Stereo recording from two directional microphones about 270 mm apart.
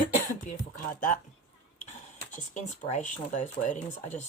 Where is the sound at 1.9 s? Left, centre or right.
Left.